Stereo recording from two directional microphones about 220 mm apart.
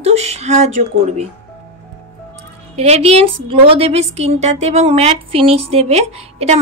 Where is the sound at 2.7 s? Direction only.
30° right (ahead or behind).